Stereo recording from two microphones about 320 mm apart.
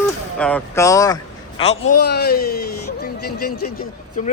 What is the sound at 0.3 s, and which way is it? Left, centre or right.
A man's voice, centre.